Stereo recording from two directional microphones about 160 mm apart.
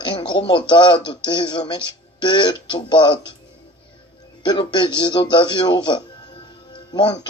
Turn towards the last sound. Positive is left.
turn(degrees=25)  # may be behind; listen again after turning